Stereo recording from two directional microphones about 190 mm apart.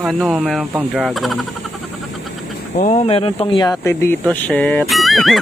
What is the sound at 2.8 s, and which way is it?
Speech, 35° left (ahead or behind).